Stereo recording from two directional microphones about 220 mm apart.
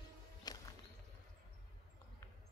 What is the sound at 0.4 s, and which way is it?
Music, 15° left (ahead or behind).